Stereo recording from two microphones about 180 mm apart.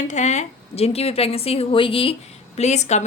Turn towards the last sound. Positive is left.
turn(degrees=40)  # may be behind; listen again after turning